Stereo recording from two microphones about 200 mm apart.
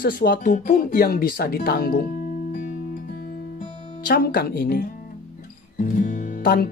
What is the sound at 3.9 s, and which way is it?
Music, 45° left (ahead or behind).